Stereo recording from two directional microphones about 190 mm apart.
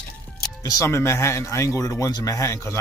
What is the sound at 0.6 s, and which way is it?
Speech, 15° left (ahead or behind).